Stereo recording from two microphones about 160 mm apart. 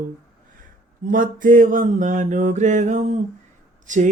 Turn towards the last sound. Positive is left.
turn(degrees=-50)  # may be behind; listen again after turning